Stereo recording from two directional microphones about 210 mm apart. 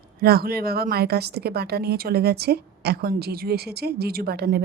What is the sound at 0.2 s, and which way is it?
A woman's voice, 45° right (ahead or behind).